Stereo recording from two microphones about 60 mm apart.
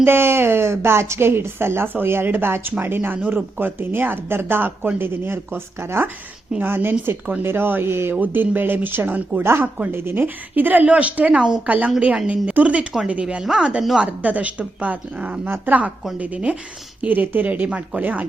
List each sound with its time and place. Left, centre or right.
0.0 s a woman's voice: right; by 12.9 s centre
13.4 s speech: centre
13.9 s speech: right
15.4 s a woman's voice: right
16.1 s speech: right